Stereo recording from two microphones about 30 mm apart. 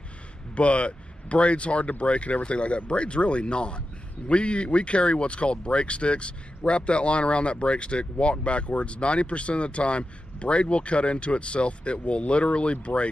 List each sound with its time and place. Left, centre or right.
0.6 s speech: left